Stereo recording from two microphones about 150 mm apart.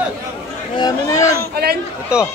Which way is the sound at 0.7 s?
25° left (ahead or behind).